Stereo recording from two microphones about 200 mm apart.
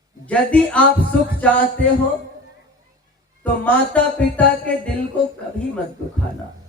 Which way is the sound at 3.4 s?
10° left (ahead or behind).